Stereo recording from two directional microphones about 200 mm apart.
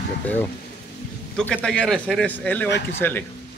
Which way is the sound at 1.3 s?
5° left (ahead or behind).